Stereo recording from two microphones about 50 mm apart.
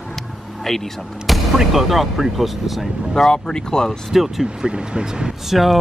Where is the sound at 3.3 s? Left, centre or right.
Centre.